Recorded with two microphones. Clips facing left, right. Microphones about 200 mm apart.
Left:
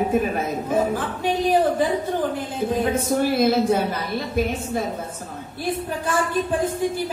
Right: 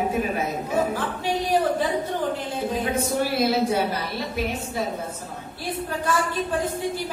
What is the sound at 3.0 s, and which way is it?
A man's voice, 50° left (ahead or behind).